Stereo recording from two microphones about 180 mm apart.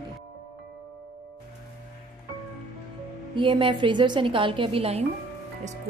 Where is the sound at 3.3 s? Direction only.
25° right (ahead or behind).